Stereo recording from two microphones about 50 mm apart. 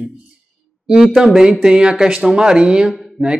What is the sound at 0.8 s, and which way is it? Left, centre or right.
A man's voice, centre.